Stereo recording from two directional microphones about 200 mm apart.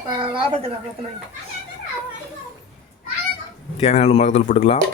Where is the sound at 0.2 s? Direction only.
25° right (ahead or behind).